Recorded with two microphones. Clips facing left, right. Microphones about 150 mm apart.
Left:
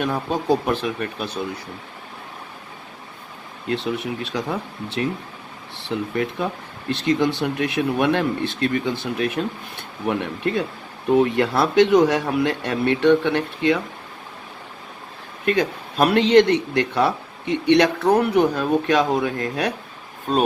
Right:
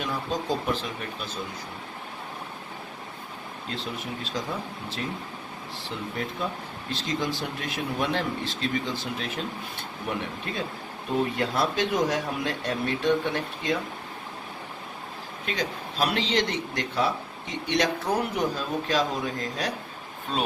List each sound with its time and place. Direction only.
0.0 s speech: 60° left (ahead or behind)
3.7 s speech: 70° left (ahead or behind)
11.1 s speech: 75° left (ahead or behind)
15.4 s speech: 60° left (ahead or behind)
20.3 s speech: 45° left (ahead or behind)